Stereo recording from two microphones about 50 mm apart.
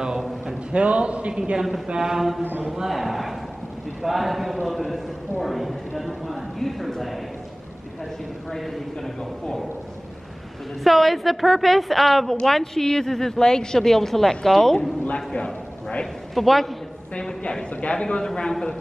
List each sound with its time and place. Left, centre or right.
0.7 s a man's voice: right
1.4 s a man's voice: centre
10.8 s a man's voice: centre
15.3 s a sound: left
16.3 s a man's voice: centre
17.4 s a man's voice: left